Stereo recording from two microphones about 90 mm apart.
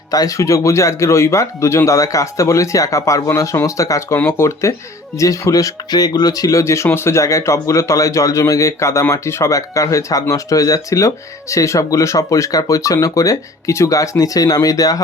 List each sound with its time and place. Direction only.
0.1 s speech: 40° left (ahead or behind)